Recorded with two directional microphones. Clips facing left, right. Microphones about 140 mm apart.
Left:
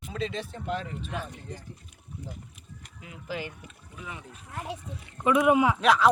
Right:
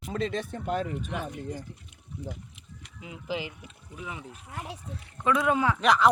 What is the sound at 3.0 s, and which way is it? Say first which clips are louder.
Speech: right 2 dB; 20° right (ahead or behind).